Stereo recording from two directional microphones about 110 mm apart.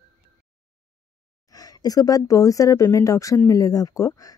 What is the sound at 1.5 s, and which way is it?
Speech, 35° left (ahead or behind).